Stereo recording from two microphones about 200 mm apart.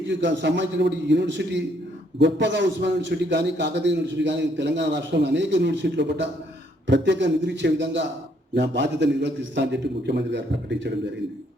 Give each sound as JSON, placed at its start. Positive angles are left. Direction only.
{"t": 0.2, "sound": "a man's voice", "side_deg": -60}